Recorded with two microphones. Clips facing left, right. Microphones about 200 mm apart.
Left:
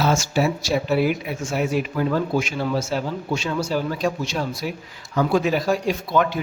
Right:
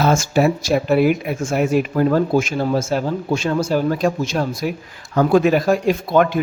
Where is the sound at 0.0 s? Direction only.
50° right (ahead or behind).